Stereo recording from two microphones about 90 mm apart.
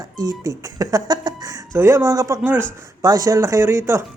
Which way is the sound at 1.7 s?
30° right (ahead or behind).